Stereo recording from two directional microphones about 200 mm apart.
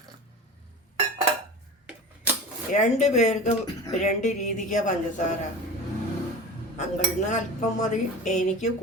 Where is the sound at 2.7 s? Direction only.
35° left (ahead or behind).